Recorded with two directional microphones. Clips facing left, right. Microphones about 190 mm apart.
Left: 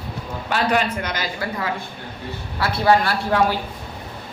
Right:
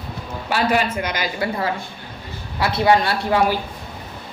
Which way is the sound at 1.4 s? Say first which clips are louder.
Right 3 dB; 35° right (ahead or behind).